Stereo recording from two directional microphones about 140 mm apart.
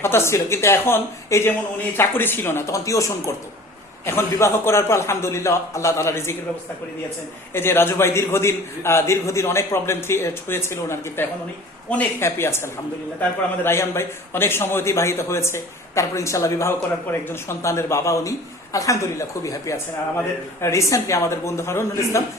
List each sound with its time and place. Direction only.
0.0 s a man's voice: 15° left (ahead or behind)
7.5 s a man's voice: 15° left (ahead or behind)